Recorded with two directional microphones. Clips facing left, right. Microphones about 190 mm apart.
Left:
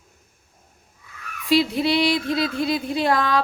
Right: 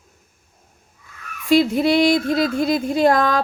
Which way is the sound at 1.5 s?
50° right (ahead or behind).